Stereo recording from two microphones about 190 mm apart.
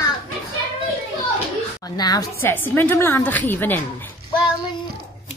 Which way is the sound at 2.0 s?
20° left (ahead or behind).